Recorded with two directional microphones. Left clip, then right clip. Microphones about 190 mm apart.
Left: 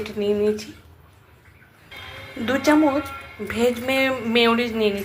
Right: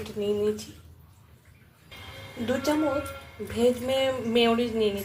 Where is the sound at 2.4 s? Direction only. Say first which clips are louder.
Left 8 dB; 15° left (ahead or behind).